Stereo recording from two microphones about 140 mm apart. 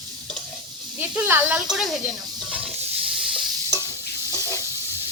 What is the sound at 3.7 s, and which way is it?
Stir, 20° left (ahead or behind).